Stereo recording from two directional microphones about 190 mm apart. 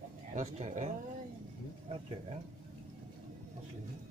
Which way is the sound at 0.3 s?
40° right (ahead or behind).